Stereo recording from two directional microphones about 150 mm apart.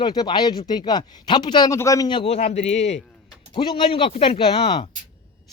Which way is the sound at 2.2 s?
45° left (ahead or behind).